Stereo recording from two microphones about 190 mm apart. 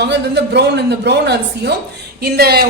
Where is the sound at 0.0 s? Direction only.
65° right (ahead or behind).